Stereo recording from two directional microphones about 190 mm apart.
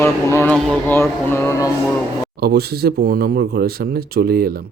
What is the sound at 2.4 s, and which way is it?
Speech, 55° right (ahead or behind).